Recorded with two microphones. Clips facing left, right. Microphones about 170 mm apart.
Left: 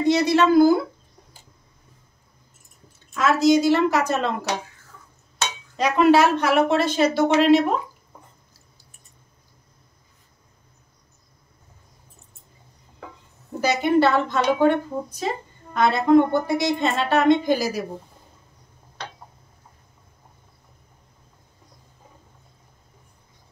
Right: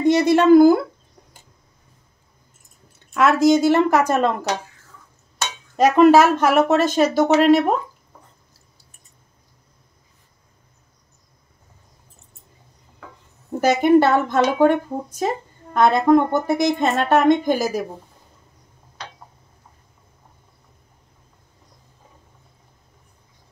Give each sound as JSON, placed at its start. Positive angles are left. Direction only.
{"t": 0.0, "sound": "speech", "side_deg": -50}
{"t": 3.2, "sound": "speech", "side_deg": -55}
{"t": 5.8, "sound": "speech", "side_deg": -45}
{"t": 13.6, "sound": "speech", "side_deg": -50}